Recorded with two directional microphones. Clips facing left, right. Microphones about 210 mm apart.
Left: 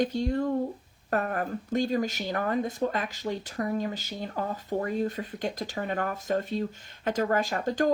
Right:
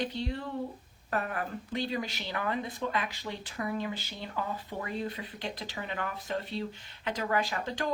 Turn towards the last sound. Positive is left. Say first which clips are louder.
# left 6 dB
turn(degrees=45)  # may be behind; listen again after turning